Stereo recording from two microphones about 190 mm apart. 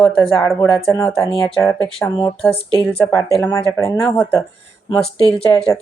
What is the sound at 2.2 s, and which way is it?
Speech, 15° left (ahead or behind).